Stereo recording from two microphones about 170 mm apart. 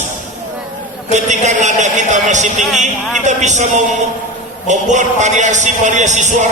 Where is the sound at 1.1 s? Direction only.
45° right (ahead or behind).